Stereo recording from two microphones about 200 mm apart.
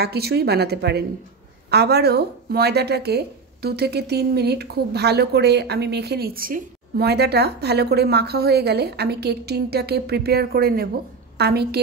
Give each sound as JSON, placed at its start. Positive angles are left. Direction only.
{"t": 0.0, "sound": "a woman's voice", "side_deg": -55}